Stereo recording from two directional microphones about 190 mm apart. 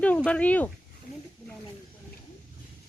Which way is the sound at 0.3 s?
5° left (ahead or behind).